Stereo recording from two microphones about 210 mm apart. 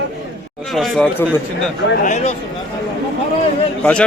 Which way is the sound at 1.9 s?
35° left (ahead or behind).